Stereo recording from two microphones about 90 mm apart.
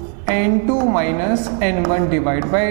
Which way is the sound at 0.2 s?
20° right (ahead or behind).